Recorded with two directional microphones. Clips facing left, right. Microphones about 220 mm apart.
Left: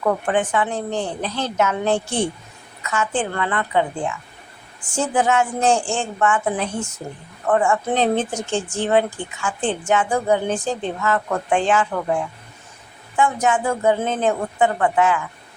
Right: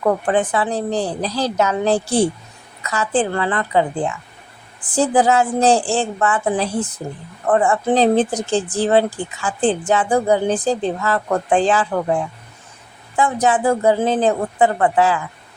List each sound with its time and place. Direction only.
0.0 s a woman's voice: 35° right (ahead or behind)